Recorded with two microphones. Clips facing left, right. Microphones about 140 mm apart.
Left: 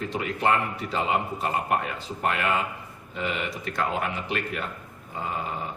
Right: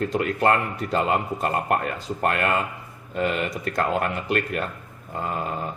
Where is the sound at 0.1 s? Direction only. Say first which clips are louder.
Right 1 dB; 50° right (ahead or behind).